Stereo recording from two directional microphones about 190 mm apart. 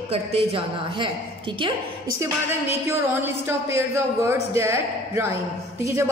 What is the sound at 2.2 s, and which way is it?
Speech, 10° right (ahead or behind).